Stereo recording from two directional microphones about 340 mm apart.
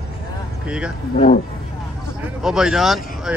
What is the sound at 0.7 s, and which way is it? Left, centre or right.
Speech, centre.